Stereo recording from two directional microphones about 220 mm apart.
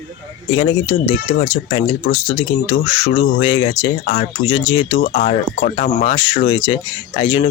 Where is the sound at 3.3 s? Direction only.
25° left (ahead or behind).